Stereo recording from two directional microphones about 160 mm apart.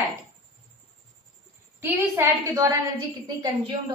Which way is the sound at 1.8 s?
20° right (ahead or behind).